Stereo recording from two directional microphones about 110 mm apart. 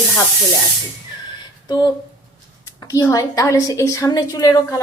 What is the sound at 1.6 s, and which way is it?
Speech, 35° left (ahead or behind).